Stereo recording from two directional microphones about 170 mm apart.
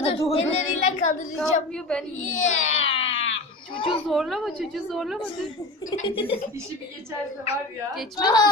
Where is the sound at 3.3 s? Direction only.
30° left (ahead or behind).